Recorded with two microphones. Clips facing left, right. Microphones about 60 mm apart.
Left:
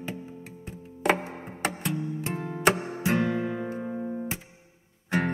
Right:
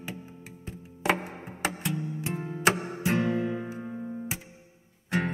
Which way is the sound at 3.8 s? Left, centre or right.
Left.